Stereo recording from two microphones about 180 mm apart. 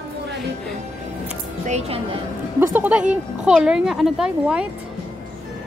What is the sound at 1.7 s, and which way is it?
Speech, 35° right (ahead or behind).